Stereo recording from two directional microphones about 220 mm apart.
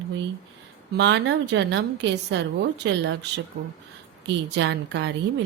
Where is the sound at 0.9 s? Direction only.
55° right (ahead or behind).